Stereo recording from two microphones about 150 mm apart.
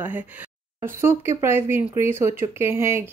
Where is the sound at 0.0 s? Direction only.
10° right (ahead or behind).